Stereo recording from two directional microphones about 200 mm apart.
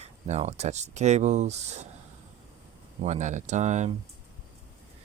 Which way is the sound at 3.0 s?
35° right (ahead or behind).